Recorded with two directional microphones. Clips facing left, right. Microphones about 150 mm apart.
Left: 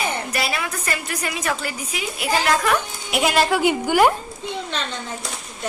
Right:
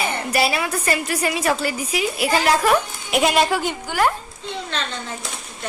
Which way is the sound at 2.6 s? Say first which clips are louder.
Right 3 dB; centre (ahead or behind).